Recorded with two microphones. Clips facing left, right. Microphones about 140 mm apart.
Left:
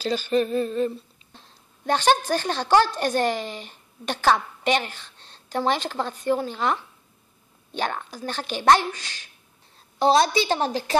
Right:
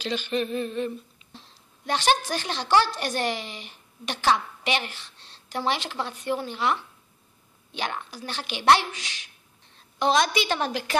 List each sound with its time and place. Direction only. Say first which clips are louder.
0.0 s humming: left 5 dB; 40° left (ahead or behind)
1.9 s a woman's voice: left 4 dB; 45° left (ahead or behind)
8.9 s speech: right 1 dB; 15° right (ahead or behind)
9.9 s a woman's voice: left 4 dB; 30° left (ahead or behind)